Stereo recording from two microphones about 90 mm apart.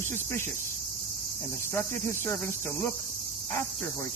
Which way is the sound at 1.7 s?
30° left (ahead or behind).